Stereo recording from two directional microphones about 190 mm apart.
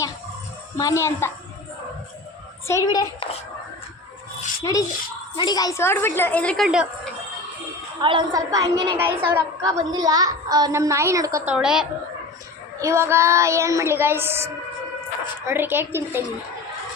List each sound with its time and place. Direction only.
0.8 s a woman's voice: 15° left (ahead or behind)
2.6 s a child's voice: 20° left (ahead or behind)
4.7 s a woman's voice: 20° left (ahead or behind); by 7.1 s 5° right (ahead or behind)
8.0 s a woman's voice: 25° right (ahead or behind); by 11.9 s 5° right (ahead or behind)
12.8 s a woman's voice: 15° right (ahead or behind)